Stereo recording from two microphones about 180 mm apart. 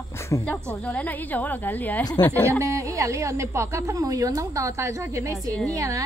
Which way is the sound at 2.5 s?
15° right (ahead or behind).